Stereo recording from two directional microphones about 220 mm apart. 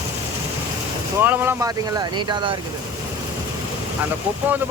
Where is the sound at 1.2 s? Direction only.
10° right (ahead or behind).